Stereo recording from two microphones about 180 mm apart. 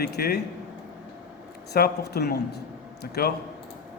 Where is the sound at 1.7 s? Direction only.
60° left (ahead or behind).